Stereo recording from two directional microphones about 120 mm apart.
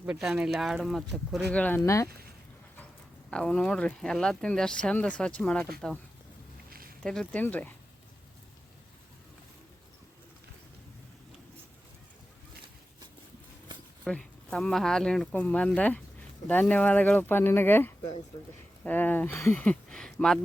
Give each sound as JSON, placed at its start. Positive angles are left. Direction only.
{"t": 0.0, "sound": "speech", "side_deg": -5}
{"t": 1.5, "sound": "speech", "side_deg": 10}
{"t": 1.8, "sound": "speech", "side_deg": 25}
{"t": 3.2, "sound": "speech", "side_deg": 5}
{"t": 7.0, "sound": "speech", "side_deg": 5}
{"t": 14.0, "sound": "speech", "side_deg": 5}